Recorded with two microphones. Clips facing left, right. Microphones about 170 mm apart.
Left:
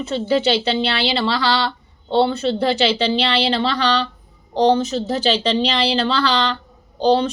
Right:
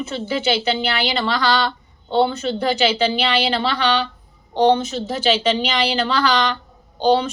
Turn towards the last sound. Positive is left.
turn(degrees=35)  # may be behind; listen again after turning